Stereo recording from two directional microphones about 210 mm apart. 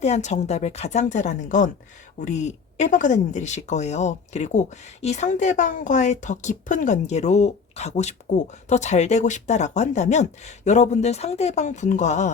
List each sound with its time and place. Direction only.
0.0 s speech: 35° left (ahead or behind)